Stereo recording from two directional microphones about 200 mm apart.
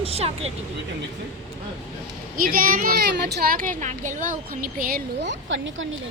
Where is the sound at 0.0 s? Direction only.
30° right (ahead or behind).